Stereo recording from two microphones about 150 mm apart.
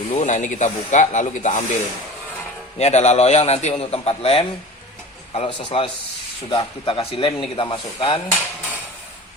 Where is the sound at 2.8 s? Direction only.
45° left (ahead or behind).